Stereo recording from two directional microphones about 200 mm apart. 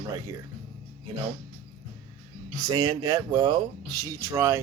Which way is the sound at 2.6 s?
20° right (ahead or behind).